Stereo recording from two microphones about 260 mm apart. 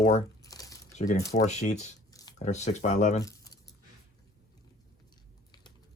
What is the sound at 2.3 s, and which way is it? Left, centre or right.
Speech, left.